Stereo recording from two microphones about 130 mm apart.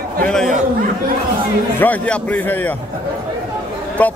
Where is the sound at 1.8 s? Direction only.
10° left (ahead or behind).